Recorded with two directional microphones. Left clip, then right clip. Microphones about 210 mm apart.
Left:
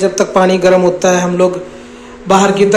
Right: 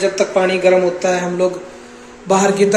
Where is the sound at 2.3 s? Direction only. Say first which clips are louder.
Left 4 dB; 5° right (ahead or behind).